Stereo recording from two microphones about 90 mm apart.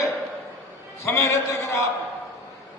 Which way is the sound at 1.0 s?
35° left (ahead or behind).